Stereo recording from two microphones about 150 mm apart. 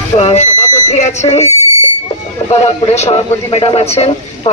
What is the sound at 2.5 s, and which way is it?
Speech, 45° left (ahead or behind).